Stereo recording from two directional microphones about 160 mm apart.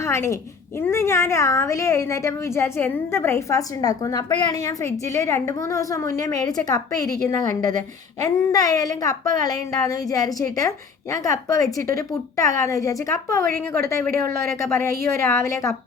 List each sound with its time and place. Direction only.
0.0 s a woman's voice: 15° left (ahead or behind)